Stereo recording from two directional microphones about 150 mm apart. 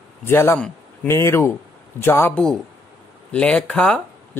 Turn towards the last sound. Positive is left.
turn(degrees=5)  # may be behind; listen again after turning